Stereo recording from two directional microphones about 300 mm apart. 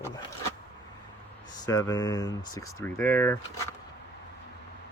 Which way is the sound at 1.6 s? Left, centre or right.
Centre.